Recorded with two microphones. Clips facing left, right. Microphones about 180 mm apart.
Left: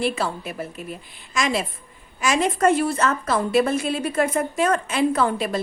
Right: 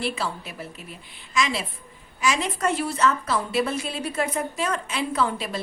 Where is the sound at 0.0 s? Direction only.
50° left (ahead or behind).